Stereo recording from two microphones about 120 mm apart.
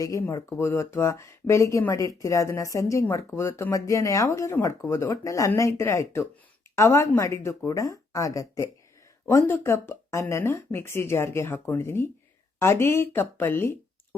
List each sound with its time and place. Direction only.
0.0 s speech: 25° left (ahead or behind)